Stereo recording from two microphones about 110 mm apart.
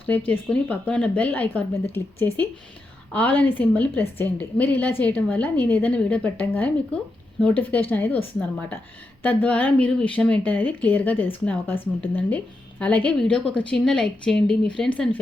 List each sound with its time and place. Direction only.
0.3 s a woman's voice: 10° left (ahead or behind)
12.8 s a woman's voice: 10° left (ahead or behind)